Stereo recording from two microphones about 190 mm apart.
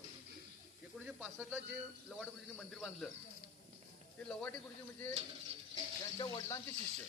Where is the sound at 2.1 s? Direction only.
Centre (ahead or behind).